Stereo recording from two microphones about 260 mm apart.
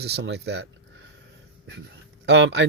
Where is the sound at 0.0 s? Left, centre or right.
Right.